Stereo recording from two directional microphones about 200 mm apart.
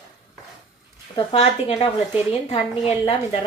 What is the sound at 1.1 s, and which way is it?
A woman's voice, 30° left (ahead or behind).